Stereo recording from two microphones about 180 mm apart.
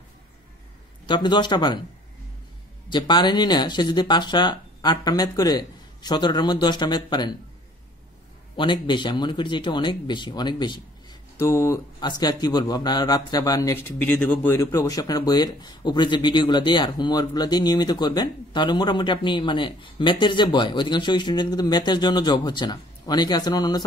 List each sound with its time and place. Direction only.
1.0 s speech: 25° left (ahead or behind)
2.9 s speech: 25° left (ahead or behind)
8.5 s speech: 25° left (ahead or behind)